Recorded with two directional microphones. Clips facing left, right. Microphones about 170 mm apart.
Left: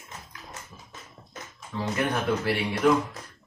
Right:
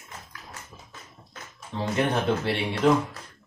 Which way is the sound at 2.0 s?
25° right (ahead or behind).